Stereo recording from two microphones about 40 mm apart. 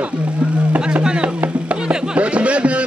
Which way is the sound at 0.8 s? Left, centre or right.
Right.